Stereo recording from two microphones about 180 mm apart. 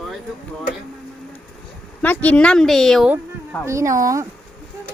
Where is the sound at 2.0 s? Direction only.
10° left (ahead or behind).